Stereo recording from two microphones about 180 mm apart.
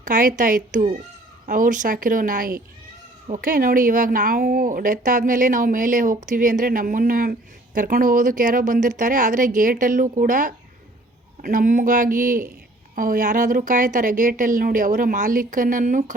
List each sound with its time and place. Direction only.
0.0 s speech: 45° right (ahead or behind)